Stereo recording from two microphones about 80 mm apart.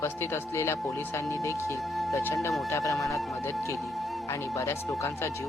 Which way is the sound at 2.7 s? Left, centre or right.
Left.